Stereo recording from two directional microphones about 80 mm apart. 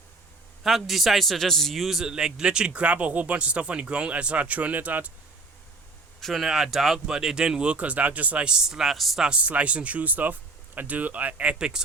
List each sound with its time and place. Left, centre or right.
0.6 s a man's voice: centre; by 5.1 s right
6.1 s a man's voice: centre